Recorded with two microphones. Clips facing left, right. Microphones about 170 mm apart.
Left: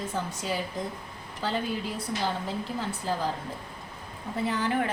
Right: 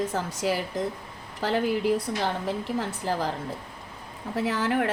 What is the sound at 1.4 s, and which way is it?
Speech, 80° right.